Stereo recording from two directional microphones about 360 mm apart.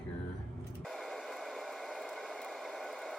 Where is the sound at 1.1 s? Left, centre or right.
Centre.